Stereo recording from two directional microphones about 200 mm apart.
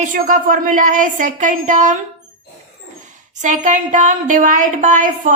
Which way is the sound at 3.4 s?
35° right (ahead or behind).